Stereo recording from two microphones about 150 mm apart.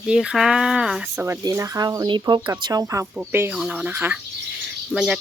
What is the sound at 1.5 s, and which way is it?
Speech, 20° right (ahead or behind).